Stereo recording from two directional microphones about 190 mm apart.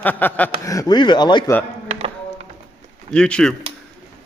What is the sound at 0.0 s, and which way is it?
Speech, 10° left (ahead or behind).